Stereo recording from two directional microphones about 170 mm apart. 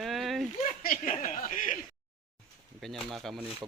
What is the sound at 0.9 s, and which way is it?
Speech, 45° left (ahead or behind).